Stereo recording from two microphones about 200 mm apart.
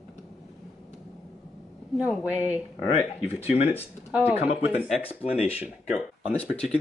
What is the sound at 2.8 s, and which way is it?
Speech, 30° left (ahead or behind).